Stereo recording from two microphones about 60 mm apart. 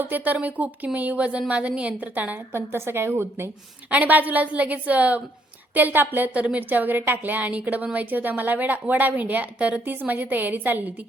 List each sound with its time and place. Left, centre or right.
0.0 s a woman's voice: right
2.5 s a woman's voice: right
3.8 s a woman's voice: right